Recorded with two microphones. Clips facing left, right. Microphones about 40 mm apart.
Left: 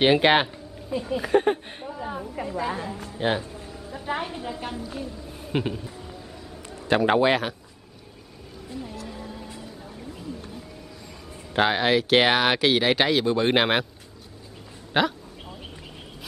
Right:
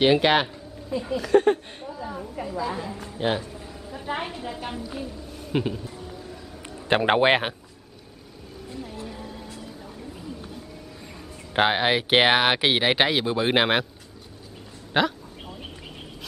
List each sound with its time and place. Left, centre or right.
0.0 s speech: centre
1.9 s a sound: left
2.4 s a woman's voice: centre
2.9 s a woman's voice: centre
3.9 s a sound: centre
4.3 s a woman's voice: centre
5.3 s a sound: centre
6.6 s a man's voice: right
9.1 s music: centre
11.1 s speech: centre
14.9 s a woman's voice: centre